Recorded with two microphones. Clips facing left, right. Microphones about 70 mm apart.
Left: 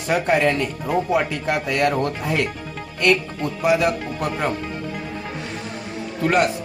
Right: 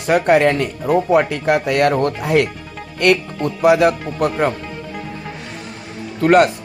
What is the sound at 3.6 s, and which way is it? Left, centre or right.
Speech, right.